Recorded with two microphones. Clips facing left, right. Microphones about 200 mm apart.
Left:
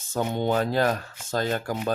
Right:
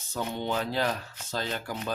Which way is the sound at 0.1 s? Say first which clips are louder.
Left 6 dB; 50° left (ahead or behind).